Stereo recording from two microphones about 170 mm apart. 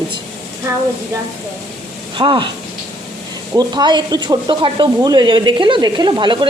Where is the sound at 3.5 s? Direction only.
25° right (ahead or behind).